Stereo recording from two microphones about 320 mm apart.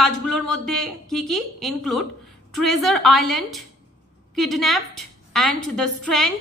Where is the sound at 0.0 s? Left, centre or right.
Centre.